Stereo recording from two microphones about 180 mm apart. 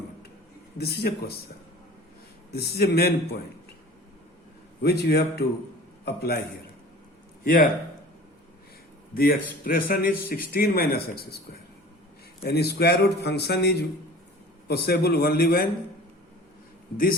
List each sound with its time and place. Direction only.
0.8 s speech: 60° left (ahead or behind)
2.5 s speech: 60° left (ahead or behind)
4.8 s speech: 65° left (ahead or behind)
7.4 s a man's voice: 55° left (ahead or behind)
9.1 s speech: 55° left (ahead or behind)
12.4 s speech: 60° left (ahead or behind)